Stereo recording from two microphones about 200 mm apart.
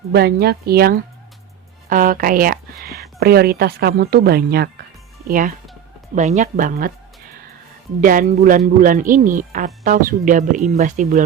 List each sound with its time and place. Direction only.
0.1 s speech: 50° right (ahead or behind)
8.0 s speech: 45° right (ahead or behind)